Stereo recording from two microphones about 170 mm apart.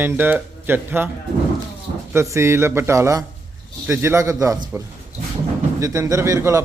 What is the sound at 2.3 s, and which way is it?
Speech, 15° right (ahead or behind).